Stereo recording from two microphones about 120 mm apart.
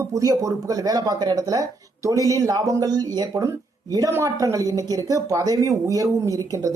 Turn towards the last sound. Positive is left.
turn(degrees=-30)  # may be behind; listen again after turning